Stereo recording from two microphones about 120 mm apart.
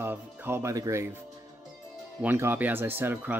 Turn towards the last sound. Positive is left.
turn(degrees=-15)  # may be behind; listen again after turning